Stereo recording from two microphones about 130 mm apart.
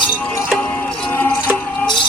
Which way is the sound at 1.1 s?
10° left (ahead or behind).